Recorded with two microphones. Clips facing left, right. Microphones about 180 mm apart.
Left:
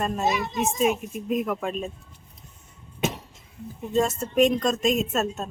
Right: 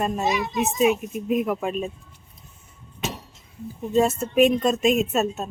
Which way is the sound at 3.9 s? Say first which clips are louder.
Right 3 dB; 5° right (ahead or behind).